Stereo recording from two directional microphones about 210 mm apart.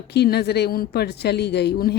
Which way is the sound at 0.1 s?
50° left (ahead or behind).